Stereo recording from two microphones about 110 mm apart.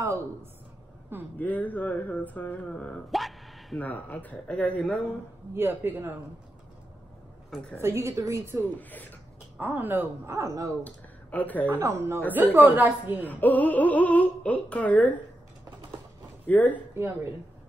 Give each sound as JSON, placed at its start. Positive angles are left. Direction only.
{"t": 0.0, "sound": "a woman's voice", "side_deg": -25}
{"t": 1.4, "sound": "speech", "side_deg": 15}
{"t": 3.1, "sound": "gasp", "side_deg": 0}
{"t": 3.8, "sound": "speech", "side_deg": 15}
{"t": 5.5, "sound": "speech", "side_deg": -20}
{"t": 7.7, "sound": "speech", "side_deg": -25}
{"t": 9.6, "sound": "speech", "side_deg": -15}
{"t": 10.8, "sound": "speech", "side_deg": 15}
{"t": 11.8, "sound": "a woman's voice", "side_deg": -25}
{"t": 13.2, "sound": "speech", "side_deg": 15}
{"t": 16.4, "sound": "speech", "side_deg": 15}
{"t": 16.9, "sound": "speech", "side_deg": -20}